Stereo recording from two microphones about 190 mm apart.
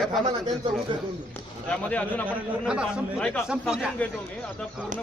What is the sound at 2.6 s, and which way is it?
Speech, 5° right (ahead or behind).